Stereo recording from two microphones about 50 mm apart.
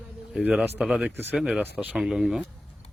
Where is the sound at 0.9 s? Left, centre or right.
Right.